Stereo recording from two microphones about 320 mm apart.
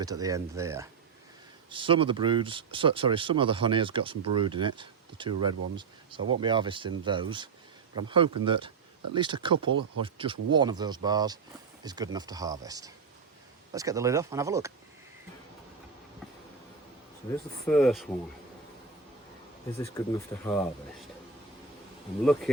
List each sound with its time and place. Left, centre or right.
0.0 s speech: centre
17.7 s speech: centre
19.8 s speech: centre
22.2 s speech: centre